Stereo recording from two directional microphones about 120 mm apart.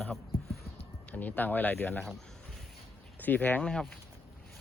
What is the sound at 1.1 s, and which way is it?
Speech, 15° left (ahead or behind).